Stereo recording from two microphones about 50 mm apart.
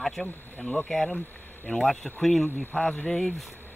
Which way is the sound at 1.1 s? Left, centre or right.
Left.